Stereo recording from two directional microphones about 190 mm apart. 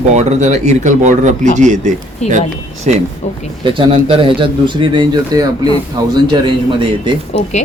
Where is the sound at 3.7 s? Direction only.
25° right (ahead or behind).